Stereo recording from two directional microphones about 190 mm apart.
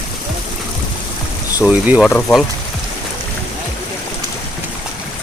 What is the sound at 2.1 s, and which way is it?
Speech, 10° left (ahead or behind).